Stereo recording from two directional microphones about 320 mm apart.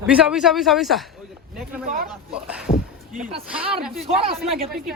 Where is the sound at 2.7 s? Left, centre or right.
Left.